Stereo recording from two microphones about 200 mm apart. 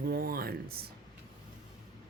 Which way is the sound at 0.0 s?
50° right (ahead or behind).